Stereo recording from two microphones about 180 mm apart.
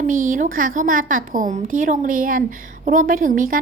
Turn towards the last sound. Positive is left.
turn(degrees=-50)  # may be behind; listen again after turning